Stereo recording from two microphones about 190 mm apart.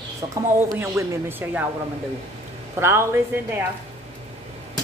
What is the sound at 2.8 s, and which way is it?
Speech, 15° right (ahead or behind).